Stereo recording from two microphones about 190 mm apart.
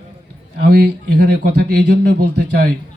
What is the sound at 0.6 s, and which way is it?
Speech, 60° right (ahead or behind).